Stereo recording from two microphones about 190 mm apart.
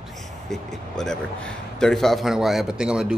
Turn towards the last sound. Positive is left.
turn(degrees=-5)  # may be behind; listen again after turning